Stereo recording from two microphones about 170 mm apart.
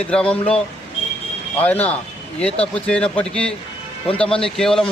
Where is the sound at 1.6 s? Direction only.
10° left (ahead or behind).